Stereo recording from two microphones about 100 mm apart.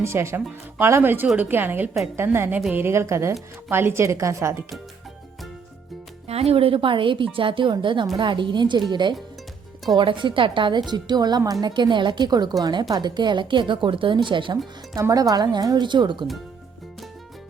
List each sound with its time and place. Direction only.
0.0 s a woman's voice: 25° right (ahead or behind)
6.2 s speech: 90° right; by 14.6 s 55° right (ahead or behind)
15.1 s speech: 40° right (ahead or behind)